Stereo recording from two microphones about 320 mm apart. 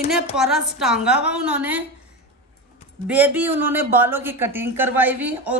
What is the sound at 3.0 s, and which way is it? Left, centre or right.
Speech, centre.